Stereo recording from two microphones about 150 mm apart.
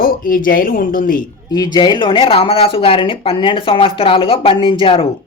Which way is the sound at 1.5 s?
25° left (ahead or behind).